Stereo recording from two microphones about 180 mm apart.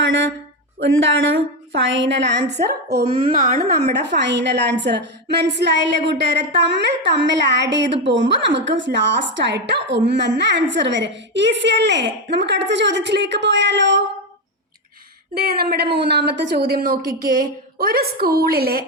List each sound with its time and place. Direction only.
0.8 s a woman's voice: 90° right; by 2.5 s 70° right (ahead or behind)
2.6 s a woman's voice: 60° right (ahead or behind); by 14.0 s 85° right
15.4 s a woman's voice: 60° right (ahead or behind)